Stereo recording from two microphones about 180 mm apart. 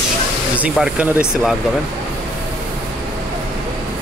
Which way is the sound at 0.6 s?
5° right (ahead or behind).